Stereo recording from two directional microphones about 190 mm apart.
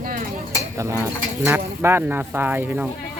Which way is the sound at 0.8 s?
15° right (ahead or behind).